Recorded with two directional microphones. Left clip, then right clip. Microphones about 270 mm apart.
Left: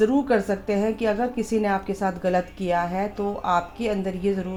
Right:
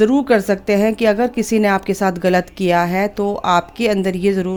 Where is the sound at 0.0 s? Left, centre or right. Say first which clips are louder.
Right 7 dB; right.